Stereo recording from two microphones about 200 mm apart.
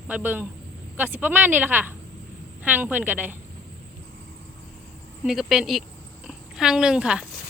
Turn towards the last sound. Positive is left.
turn(degrees=-5)  # may be behind; listen again after turning